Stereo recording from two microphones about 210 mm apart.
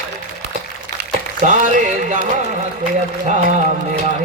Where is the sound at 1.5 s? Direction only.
35° right (ahead or behind).